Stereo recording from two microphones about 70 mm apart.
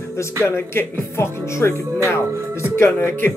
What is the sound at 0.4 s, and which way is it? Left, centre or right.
Speech, left.